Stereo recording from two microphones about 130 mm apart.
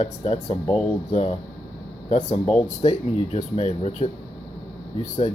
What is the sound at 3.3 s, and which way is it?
Speech, 55° left (ahead or behind).